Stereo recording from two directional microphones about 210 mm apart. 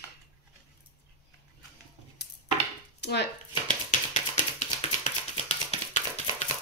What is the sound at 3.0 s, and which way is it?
Chopping, 55° left (ahead or behind).